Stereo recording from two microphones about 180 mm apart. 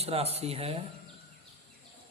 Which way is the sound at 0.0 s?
35° right (ahead or behind).